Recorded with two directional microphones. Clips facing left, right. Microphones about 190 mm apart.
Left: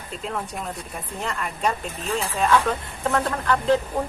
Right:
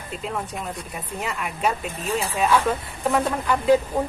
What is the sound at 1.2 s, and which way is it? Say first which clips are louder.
Speech: even; 5° right (ahead or behind).